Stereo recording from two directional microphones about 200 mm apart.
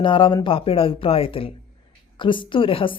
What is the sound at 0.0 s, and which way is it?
Speech, 25° left (ahead or behind).